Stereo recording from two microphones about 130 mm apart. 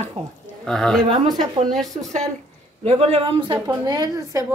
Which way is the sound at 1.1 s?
30° right (ahead or behind).